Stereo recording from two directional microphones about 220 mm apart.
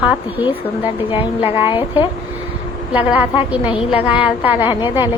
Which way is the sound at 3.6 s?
25° left (ahead or behind).